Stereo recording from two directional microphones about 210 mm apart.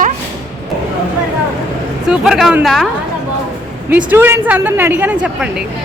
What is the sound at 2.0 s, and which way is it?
Speech, 5° right (ahead or behind).